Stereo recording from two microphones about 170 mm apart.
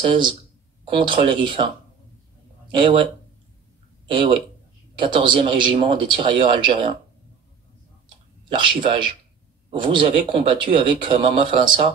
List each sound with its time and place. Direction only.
0.0 s speech: 30° right (ahead or behind)
2.7 s speech: 30° right (ahead or behind)
4.9 s speech: 30° right (ahead or behind)
8.5 s speech: 30° right (ahead or behind)